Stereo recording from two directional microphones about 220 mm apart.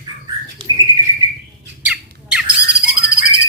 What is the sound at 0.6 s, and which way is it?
Rodents, 20° right (ahead or behind).